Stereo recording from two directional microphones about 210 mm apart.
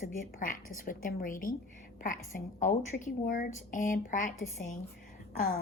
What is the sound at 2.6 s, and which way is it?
Speech, 35° left (ahead or behind).